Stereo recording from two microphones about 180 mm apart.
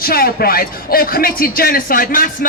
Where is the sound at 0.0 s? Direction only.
55° left (ahead or behind).